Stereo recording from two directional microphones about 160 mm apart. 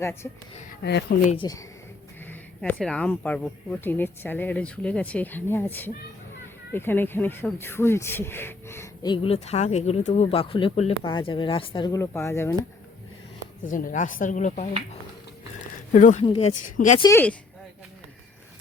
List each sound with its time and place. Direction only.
0.0 s speech: 15° left (ahead or behind)
0.8 s speech: 90° left
1.4 s speech: 25° left (ahead or behind)
2.6 s speech: 5° left (ahead or behind)
9.0 s speech: 35° left (ahead or behind)
11.9 s speech: 15° left (ahead or behind)
13.7 s speech: 55° left (ahead or behind)
15.9 s speech: 50° left (ahead or behind)
16.2 s speech: 35° left (ahead or behind)
16.7 s speech: 50° left (ahead or behind)
17.0 s speech: 20° left (ahead or behind)